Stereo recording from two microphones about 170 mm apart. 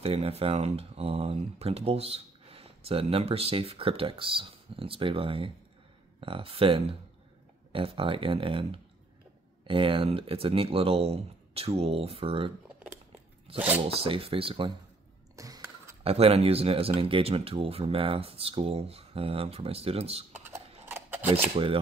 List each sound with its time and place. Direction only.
0.0 s speech: 35° right (ahead or behind)
15.3 s a sound: 20° right (ahead or behind)
16.0 s speech: 35° right (ahead or behind)
20.8 s scissors: 15° right (ahead or behind)